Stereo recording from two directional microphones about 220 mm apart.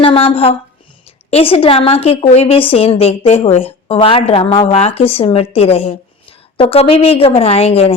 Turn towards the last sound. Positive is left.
turn(degrees=25)  # may be behind; listen again after turning